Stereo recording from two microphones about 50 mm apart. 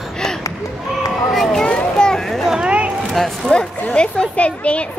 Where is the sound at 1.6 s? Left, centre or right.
Centre.